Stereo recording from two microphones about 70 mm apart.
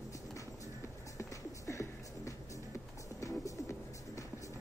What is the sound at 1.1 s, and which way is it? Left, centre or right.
Music, left.